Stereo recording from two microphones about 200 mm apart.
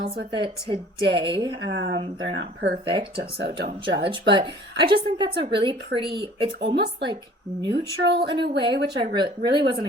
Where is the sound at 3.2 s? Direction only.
50° right (ahead or behind).